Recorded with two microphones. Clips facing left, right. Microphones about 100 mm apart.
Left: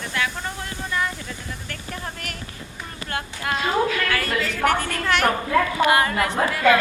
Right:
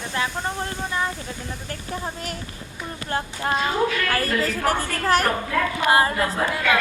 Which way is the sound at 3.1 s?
30° right (ahead or behind).